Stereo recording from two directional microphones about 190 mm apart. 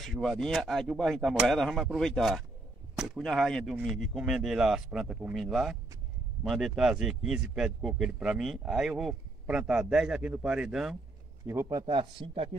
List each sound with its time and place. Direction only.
0.0 s a man's voice: centre (ahead or behind)
11.8 s speech: 25° right (ahead or behind)